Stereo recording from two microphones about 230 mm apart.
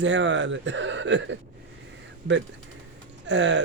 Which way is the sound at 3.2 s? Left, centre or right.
Right.